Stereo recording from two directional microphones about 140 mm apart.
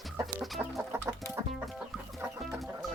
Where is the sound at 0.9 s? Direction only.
20° right (ahead or behind).